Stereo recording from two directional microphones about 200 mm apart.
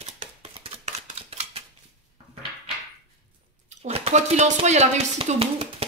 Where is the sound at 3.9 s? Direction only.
30° right (ahead or behind).